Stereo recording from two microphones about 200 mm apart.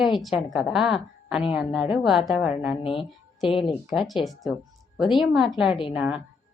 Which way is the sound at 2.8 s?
25° left (ahead or behind).